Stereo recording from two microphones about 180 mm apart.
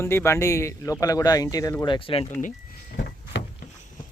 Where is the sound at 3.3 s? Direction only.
75° left (ahead or behind).